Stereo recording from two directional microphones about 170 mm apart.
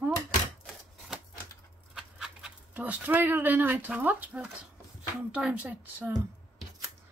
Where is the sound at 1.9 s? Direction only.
5° right (ahead or behind).